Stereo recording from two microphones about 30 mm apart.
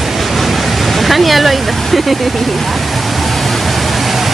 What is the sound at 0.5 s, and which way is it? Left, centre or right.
Waterfall, centre.